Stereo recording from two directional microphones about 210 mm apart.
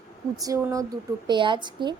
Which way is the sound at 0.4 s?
15° right (ahead or behind).